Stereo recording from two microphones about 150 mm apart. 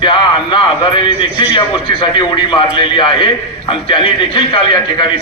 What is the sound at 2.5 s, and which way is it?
A man's voice, 30° left (ahead or behind).